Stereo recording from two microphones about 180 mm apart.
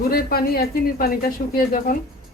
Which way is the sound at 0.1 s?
55° left (ahead or behind).